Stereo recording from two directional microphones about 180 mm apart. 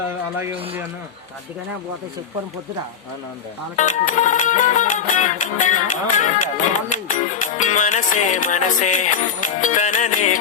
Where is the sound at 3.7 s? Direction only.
45° left (ahead or behind).